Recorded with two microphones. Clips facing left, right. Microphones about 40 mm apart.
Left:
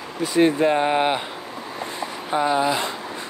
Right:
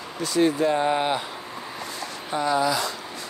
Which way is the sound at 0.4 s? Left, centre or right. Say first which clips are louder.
Left 3 dB; left.